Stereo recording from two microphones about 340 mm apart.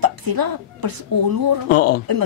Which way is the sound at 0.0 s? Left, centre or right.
Right.